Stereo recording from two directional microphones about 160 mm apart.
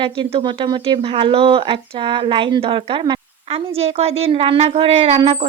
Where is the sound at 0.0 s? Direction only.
30° right (ahead or behind).